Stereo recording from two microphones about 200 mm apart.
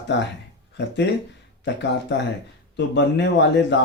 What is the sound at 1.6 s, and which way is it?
Speech, 60° left (ahead or behind).